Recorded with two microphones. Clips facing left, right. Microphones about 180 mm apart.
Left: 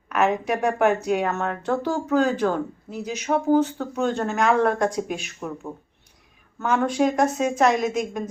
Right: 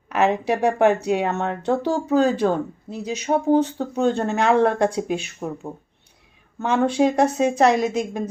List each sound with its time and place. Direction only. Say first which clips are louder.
0.1 s speech: right 2 dB; 30° right (ahead or behind)
6.6 s a woman's voice: right 2 dB; 30° right (ahead or behind)